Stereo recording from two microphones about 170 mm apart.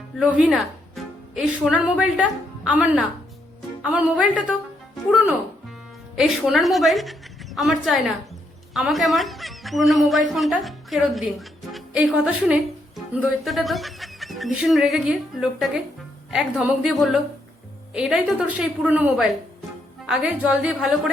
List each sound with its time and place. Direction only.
0.2 s a woman's voice: 5° right (ahead or behind)